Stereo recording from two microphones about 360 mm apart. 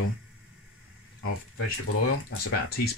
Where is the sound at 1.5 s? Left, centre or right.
Left.